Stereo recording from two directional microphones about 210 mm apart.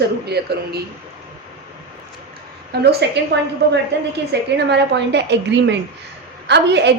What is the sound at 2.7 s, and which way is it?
A woman's voice, 50° right (ahead or behind).